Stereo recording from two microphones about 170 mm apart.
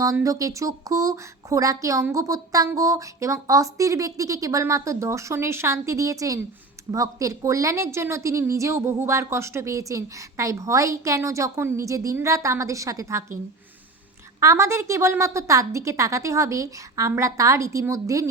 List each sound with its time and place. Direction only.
0.0 s a woman's voice: 20° right (ahead or behind)
14.4 s a woman's voice: 20° right (ahead or behind)